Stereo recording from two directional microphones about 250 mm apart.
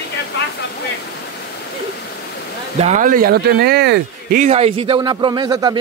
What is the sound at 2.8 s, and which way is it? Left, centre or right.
Speech, right.